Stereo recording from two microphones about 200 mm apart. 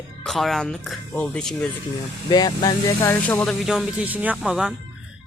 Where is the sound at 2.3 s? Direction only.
20° left (ahead or behind).